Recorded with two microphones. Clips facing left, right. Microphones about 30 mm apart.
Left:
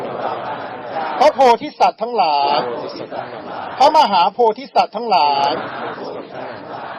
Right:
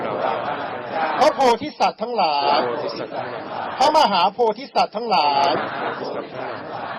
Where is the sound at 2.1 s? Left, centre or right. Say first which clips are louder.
Left 3 dB; centre.